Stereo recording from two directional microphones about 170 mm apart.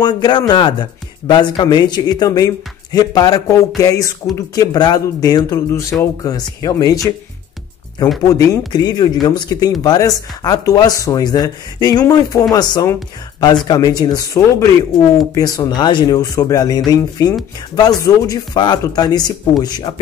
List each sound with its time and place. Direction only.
0.0 s speech: 25° left (ahead or behind)
8.3 s speech: 20° left (ahead or behind)